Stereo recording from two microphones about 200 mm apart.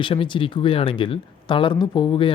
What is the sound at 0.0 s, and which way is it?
Speech, 25° left (ahead or behind).